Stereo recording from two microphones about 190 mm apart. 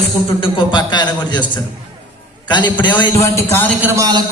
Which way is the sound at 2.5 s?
25° left (ahead or behind).